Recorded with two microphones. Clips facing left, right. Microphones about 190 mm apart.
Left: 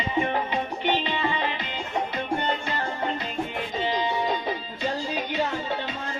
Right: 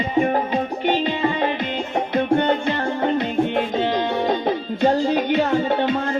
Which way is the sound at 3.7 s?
65° right (ahead or behind).